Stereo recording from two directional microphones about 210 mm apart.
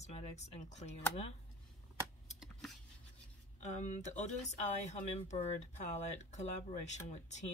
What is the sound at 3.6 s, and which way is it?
A woman's voice, 35° left (ahead or behind).